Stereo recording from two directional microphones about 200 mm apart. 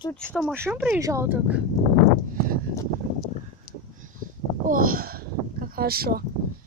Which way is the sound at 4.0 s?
40° right (ahead or behind).